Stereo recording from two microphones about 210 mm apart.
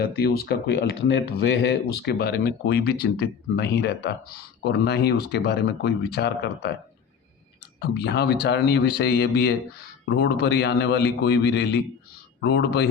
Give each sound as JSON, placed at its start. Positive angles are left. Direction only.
{"t": 0.0, "sound": "speech", "side_deg": 50}
{"t": 7.8, "sound": "speech", "side_deg": 50}